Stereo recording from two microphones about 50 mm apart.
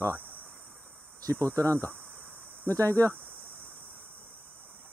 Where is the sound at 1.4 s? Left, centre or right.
Right.